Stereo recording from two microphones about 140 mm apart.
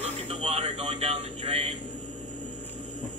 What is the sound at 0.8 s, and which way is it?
Speech, 45° right (ahead or behind).